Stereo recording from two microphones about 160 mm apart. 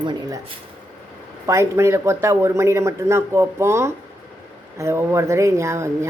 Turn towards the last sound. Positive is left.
turn(degrees=-15)  # may be behind; listen again after turning